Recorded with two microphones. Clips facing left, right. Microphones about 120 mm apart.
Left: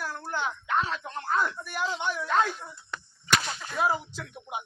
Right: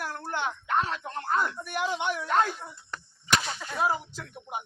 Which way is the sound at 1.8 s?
20° right (ahead or behind).